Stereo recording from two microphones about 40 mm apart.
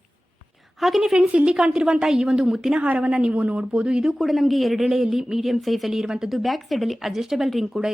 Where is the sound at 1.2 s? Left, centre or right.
Right.